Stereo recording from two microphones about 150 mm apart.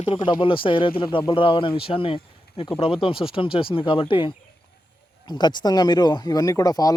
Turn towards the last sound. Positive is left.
turn(degrees=25)  # may be behind; listen again after turning